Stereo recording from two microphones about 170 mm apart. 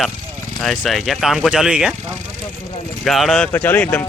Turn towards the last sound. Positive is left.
turn(degrees=10)  # may be behind; listen again after turning